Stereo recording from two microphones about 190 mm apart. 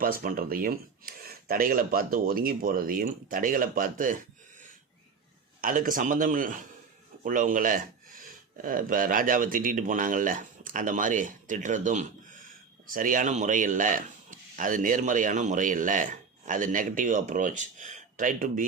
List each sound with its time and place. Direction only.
0.0 s a man's voice: 50° right (ahead or behind)
5.5 s a man's voice: 45° right (ahead or behind)